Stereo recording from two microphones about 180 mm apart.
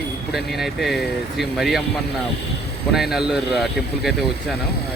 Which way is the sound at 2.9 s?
Centre (ahead or behind).